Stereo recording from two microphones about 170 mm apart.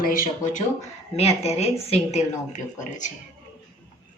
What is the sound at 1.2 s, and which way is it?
A woman's voice, 40° left (ahead or behind).